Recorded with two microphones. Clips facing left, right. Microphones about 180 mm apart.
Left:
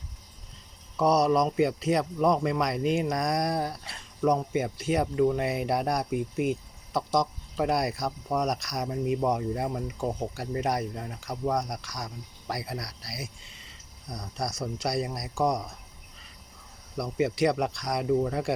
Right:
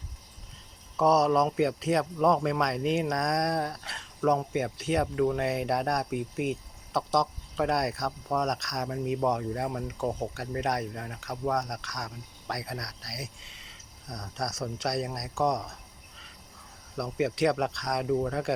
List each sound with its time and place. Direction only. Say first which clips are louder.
0.9 s speech: even; centre (ahead or behind)
17.0 s speech: left 1 dB; centre (ahead or behind)